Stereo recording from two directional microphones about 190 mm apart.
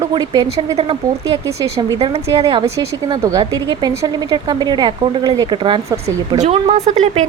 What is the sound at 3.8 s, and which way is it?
Speech, 20° right (ahead or behind).